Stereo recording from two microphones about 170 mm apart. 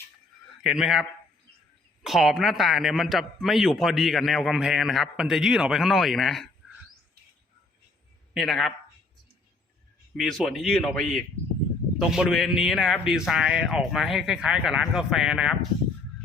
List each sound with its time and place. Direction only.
0.6 s a man's voice: centre (ahead or behind)
2.0 s a man's voice: centre (ahead or behind)
8.3 s speech: centre (ahead or behind)
10.2 s a man's voice: centre (ahead or behind)